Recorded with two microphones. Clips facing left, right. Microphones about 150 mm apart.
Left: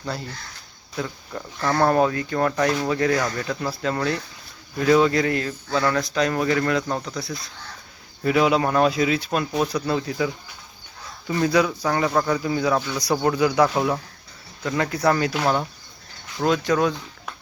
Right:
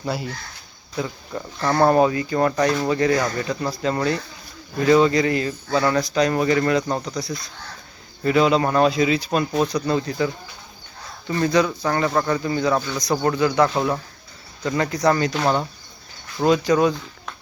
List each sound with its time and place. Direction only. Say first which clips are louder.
0.0 s speech: right 4 dB; 5° right (ahead or behind)